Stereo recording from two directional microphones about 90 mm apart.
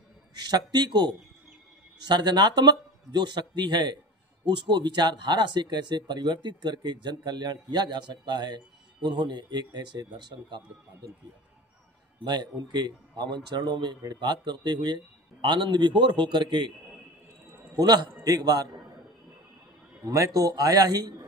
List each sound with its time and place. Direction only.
0.4 s a man's voice: 50° right (ahead or behind)
12.2 s a man's voice: 55° right (ahead or behind)
17.7 s a man's voice: 50° right (ahead or behind)
20.1 s a man's voice: 40° right (ahead or behind)